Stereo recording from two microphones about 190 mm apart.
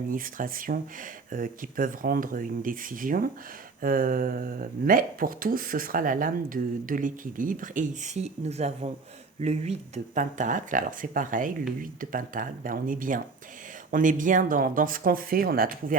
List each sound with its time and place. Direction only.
0.1 s speech: 45° right (ahead or behind)